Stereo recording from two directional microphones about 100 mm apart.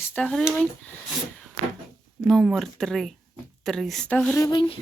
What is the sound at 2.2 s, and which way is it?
Speech, 5° left (ahead or behind).